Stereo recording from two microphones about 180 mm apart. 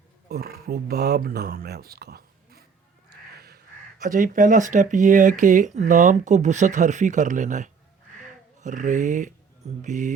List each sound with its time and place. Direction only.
0.3 s speech: 60° right (ahead or behind)
4.0 s speech: 50° right (ahead or behind)